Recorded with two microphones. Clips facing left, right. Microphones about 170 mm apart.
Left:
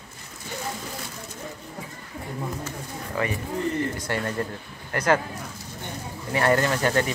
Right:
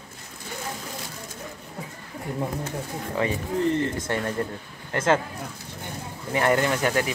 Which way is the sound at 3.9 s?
20° right (ahead or behind).